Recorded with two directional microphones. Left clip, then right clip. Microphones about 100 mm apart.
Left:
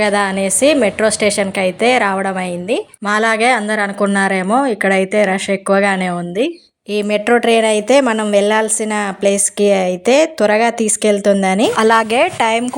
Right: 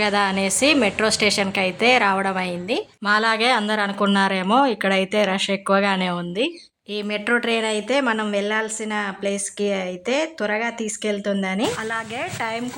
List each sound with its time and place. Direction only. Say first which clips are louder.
0.0 s a woman's voice: left 5 dB; 30° left (ahead or behind)
6.9 s a woman's voice: left 8 dB; 55° left (ahead or behind)
11.8 s speech: left 15 dB; 90° left
12.4 s a woman's voice: left 12 dB; 50° left (ahead or behind)